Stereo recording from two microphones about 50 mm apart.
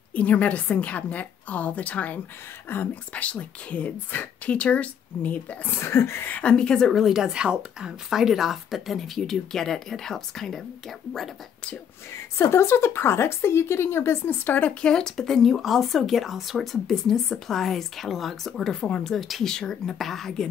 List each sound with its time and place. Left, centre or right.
0.1 s a woman's voice: left
4.1 s speech: left
4.6 s a woman's voice: left
5.7 s a woman's voice: left
6.4 s speech: centre
7.1 s speech: centre
12.4 s a woman's voice: left
14.6 s speech: left
18.8 s a woman's voice: centre
19.1 s speech: centre